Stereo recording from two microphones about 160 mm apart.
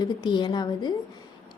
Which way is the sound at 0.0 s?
25° left (ahead or behind).